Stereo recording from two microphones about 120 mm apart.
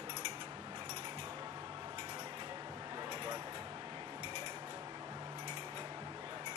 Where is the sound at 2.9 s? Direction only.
35° right (ahead or behind).